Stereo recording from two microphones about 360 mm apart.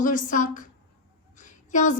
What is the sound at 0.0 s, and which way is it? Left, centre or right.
Speech, left.